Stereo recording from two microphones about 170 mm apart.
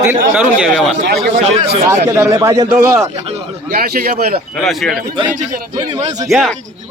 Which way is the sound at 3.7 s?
60° right (ahead or behind).